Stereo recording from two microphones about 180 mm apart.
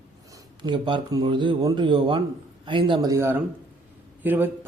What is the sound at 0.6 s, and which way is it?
Speech, 25° right (ahead or behind).